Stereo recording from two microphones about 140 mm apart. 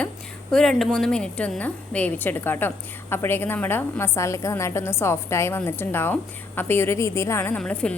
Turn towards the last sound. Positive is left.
turn(degrees=10)  # may be behind; listen again after turning